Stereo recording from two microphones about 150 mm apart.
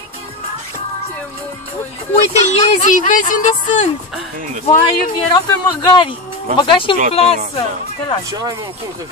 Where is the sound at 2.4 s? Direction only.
55° left (ahead or behind).